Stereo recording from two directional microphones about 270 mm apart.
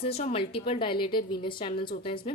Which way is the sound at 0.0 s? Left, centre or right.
Left.